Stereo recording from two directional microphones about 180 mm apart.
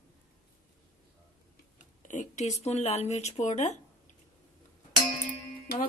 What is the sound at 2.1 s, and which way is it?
Speech, 40° left (ahead or behind).